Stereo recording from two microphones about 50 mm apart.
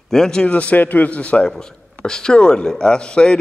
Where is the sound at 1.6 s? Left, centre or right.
Centre.